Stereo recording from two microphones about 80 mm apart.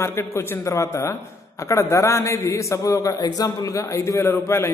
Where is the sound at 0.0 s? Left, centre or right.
Left.